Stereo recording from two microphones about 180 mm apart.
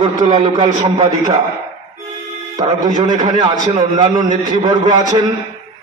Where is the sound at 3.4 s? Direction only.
20° right (ahead or behind).